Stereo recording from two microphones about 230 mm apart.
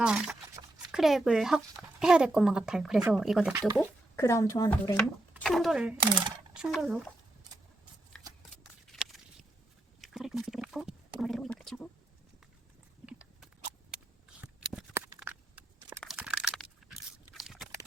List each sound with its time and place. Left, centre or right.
0.0 s speech: centre
3.8 s speech: centre
5.3 s speech: centre
6.0 s a sound: centre
6.7 s speech: centre
8.1 s shuffling cards: centre
8.9 s walk: centre
10.0 s pig: centre
11.2 s a sound: centre
13.1 s biting: centre
14.4 s a sound: centre